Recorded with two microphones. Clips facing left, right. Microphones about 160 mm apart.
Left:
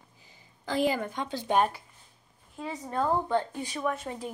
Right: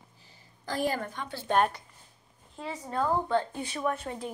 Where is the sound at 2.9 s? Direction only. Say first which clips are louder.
Even; 20° left (ahead or behind).